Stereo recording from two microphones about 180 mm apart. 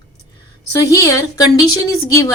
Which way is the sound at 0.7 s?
20° left (ahead or behind).